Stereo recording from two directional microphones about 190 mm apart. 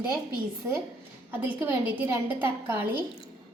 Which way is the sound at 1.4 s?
10° right (ahead or behind).